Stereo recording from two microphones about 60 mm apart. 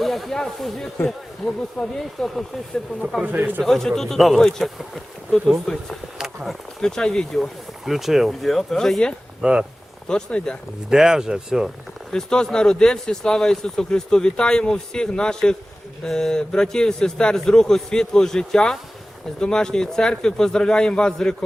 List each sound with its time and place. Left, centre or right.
0.0 s speech: centre
3.2 s speech: right
3.6 s speech: centre
6.1 s speech: centre
6.8 s speech: centre
7.3 s speech: centre
9.4 s speech: centre
10.1 s speech: centre
10.8 s speech: centre
12.1 s speech: centre